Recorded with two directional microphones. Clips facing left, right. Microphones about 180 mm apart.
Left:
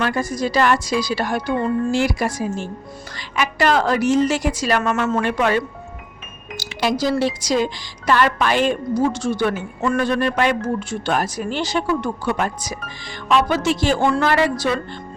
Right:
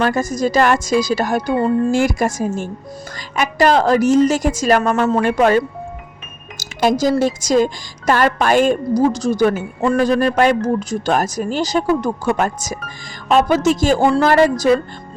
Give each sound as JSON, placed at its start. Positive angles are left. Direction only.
{"t": 0.0, "sound": "a woman's voice", "side_deg": -45}